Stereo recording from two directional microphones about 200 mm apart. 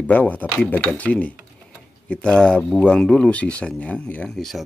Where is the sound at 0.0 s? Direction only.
10° left (ahead or behind).